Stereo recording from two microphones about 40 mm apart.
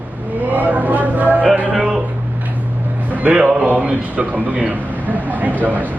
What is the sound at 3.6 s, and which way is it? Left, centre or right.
A man's voice, right.